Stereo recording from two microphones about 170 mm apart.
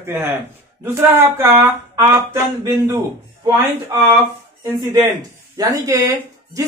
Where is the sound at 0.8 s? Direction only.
15° right (ahead or behind).